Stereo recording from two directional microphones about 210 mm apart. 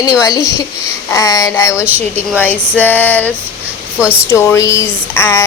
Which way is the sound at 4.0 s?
5° right (ahead or behind).